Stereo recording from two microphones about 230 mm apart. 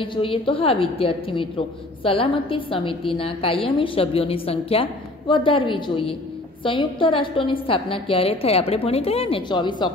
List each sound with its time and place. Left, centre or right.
0.0 s a woman's voice: left